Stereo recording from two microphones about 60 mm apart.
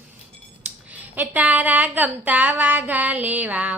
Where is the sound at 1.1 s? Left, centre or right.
Right.